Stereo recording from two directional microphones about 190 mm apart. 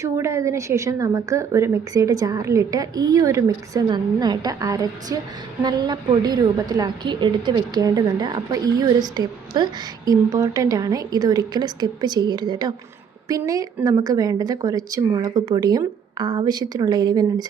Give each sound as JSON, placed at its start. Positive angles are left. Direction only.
{"t": 0.0, "sound": "a woman's voice", "side_deg": -15}